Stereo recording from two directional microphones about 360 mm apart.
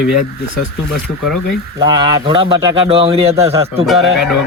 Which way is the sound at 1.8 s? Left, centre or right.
Centre.